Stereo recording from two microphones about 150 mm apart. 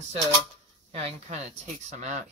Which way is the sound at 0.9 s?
45° right (ahead or behind).